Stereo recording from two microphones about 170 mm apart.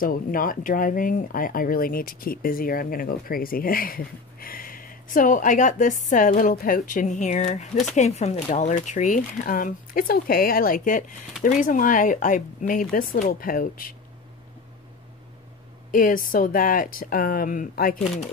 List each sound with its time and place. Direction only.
0.0 s speech: 55° left (ahead or behind)
15.9 s speech: 55° left (ahead or behind)